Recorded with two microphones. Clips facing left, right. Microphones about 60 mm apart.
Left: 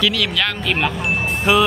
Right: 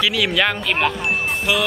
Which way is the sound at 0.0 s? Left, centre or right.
Centre.